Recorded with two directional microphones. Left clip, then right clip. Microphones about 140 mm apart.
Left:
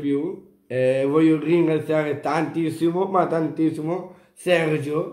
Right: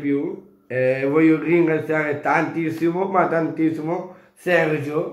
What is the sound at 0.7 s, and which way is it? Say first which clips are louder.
Speech: even; 25° left (ahead or behind).